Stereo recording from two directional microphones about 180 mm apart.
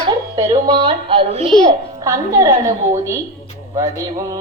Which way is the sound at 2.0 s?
15° right (ahead or behind).